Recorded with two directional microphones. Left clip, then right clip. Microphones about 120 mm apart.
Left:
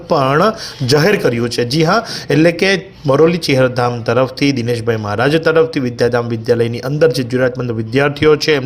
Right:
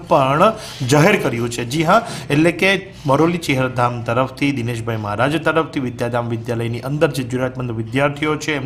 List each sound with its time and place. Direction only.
0.1 s a man's voice: 15° left (ahead or behind)
7.9 s speech: 30° left (ahead or behind)